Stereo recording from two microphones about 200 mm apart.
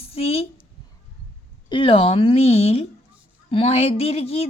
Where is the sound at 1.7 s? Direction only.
25° left (ahead or behind).